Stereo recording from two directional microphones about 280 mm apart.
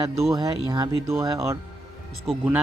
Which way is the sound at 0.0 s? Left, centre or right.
Centre.